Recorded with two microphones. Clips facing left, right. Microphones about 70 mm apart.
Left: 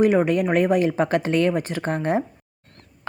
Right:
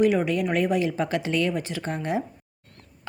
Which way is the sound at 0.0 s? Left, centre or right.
Left.